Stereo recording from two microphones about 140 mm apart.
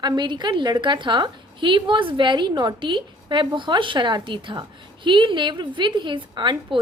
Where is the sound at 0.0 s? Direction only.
30° right (ahead or behind).